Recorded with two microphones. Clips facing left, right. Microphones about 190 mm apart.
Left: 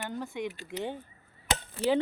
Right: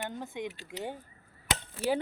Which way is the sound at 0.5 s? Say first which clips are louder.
Left 4 dB; 45° left (ahead or behind).